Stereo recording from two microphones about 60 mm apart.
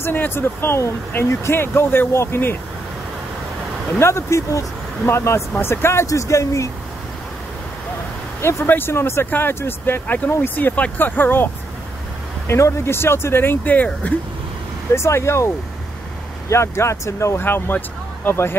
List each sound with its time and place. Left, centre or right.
0.0 s speech: left
4.0 s speech: left
6.0 s speech: left
8.4 s speech: left
10.0 s speech: left
12.4 s speech: left
15.0 s speech: left
17.4 s speech: left